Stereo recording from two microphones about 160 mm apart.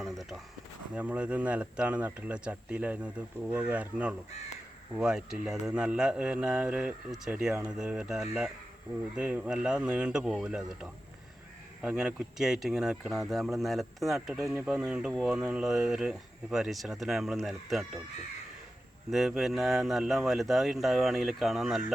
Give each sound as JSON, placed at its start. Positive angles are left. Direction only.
{"t": 0.0, "sound": "a sound", "side_deg": 0}
{"t": 0.9, "sound": "speech", "side_deg": -10}
{"t": 19.1, "sound": "speech", "side_deg": 0}